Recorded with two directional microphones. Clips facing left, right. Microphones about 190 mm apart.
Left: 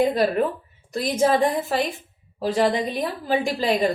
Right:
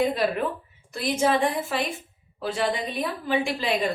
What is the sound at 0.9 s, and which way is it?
A woman's voice, 40° left (ahead or behind).